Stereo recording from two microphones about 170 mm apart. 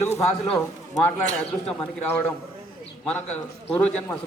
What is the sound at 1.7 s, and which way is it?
Speech, 10° left (ahead or behind).